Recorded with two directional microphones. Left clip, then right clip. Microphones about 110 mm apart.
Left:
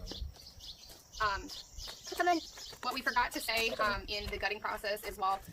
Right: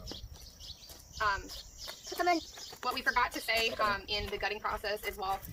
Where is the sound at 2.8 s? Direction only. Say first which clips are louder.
Right 2 dB; 35° left (ahead or behind).